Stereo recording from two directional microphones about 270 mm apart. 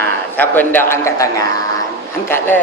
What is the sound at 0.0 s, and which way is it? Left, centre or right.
A man's voice, centre.